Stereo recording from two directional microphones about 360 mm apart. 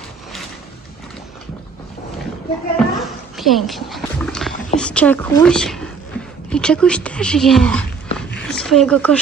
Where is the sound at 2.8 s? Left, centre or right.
Centre.